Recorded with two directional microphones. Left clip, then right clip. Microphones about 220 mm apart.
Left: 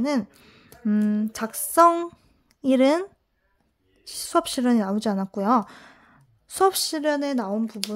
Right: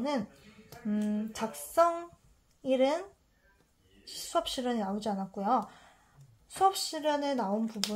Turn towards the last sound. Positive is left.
turn(degrees=45)  # may be behind; listen again after turning